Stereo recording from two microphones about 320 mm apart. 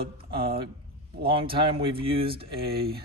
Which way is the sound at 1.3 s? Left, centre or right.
Centre.